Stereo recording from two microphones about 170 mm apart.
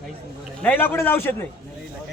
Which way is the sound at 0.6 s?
10° left (ahead or behind).